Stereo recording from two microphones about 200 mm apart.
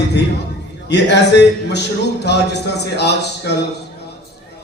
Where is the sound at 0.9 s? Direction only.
60° left (ahead or behind).